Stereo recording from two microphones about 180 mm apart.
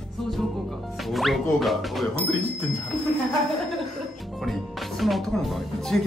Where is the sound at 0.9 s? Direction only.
Centre (ahead or behind).